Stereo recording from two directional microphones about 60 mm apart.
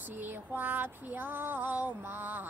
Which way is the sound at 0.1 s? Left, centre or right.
Right.